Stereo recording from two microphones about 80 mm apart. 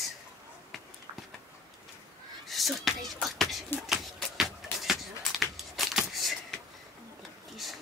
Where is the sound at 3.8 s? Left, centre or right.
Centre.